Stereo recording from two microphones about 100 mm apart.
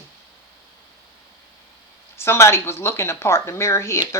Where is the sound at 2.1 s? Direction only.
25° left (ahead or behind).